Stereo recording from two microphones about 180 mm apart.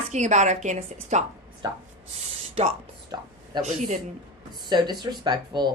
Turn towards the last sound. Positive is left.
turn(degrees=-25)  # may be behind; listen again after turning